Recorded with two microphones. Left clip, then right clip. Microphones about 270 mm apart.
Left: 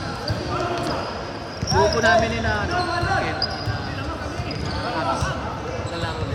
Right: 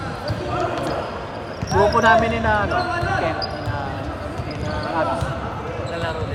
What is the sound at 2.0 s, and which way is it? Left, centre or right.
Speech, centre.